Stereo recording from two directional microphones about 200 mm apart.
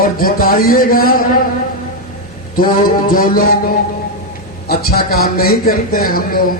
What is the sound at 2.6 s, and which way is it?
Speech, 45° left (ahead or behind).